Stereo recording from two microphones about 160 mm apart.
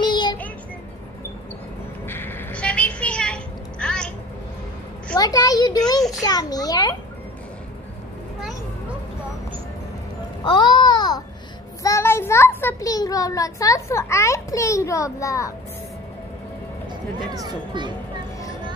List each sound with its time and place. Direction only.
0.0 s child singing: 30° left (ahead or behind)
2.0 s a sound: 15° left (ahead or behind)
5.1 s a child's voice: 25° left (ahead or behind)
10.4 s babbling: 30° left (ahead or behind)
11.8 s a child's voice: 15° left (ahead or behind)
17.5 s speech: 30° right (ahead or behind)